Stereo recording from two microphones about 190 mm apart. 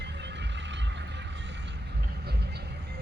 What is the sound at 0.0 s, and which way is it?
Vehicle, 65° right (ahead or behind).